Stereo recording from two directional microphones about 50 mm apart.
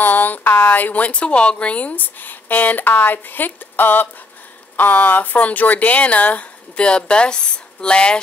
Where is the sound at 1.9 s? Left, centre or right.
Left.